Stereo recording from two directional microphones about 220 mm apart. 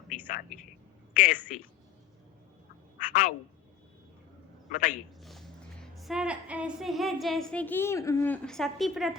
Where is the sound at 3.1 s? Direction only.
40° left (ahead or behind).